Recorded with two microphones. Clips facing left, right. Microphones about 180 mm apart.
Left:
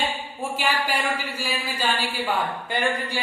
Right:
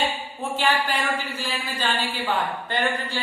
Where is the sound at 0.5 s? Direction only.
10° left (ahead or behind).